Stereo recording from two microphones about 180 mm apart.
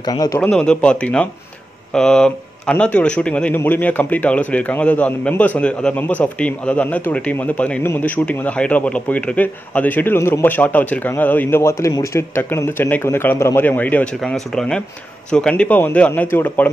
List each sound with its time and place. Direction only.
0.1 s a man's voice: 20° left (ahead or behind)
0.4 s a man's voice: 5° left (ahead or behind)